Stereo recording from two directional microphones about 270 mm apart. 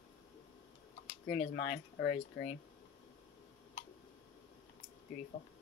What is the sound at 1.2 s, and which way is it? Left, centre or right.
Speech, left.